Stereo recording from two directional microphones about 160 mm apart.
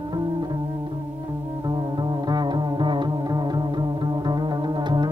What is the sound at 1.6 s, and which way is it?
Music, 30° right (ahead or behind).